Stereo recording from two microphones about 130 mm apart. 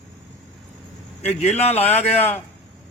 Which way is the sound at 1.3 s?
55° left (ahead or behind).